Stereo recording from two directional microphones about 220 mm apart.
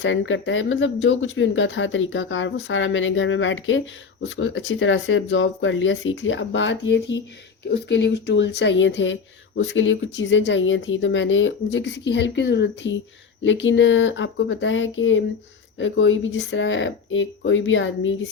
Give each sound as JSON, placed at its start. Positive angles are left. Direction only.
{"t": 0.0, "sound": "speech", "side_deg": 55}